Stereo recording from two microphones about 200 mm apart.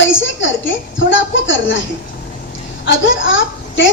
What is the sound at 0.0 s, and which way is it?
A woman's voice, 70° left (ahead or behind).